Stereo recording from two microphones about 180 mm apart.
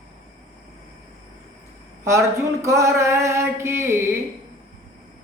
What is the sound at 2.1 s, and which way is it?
A man's voice, 15° right (ahead or behind).